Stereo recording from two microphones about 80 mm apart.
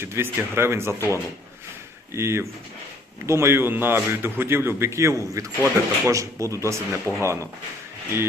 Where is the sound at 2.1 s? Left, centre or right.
Right.